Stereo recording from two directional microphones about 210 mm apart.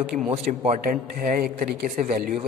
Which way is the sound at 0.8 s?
40° right (ahead or behind).